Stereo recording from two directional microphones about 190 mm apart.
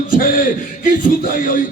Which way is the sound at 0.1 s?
45° left (ahead or behind).